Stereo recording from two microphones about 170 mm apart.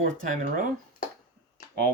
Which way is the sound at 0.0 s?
55° right (ahead or behind).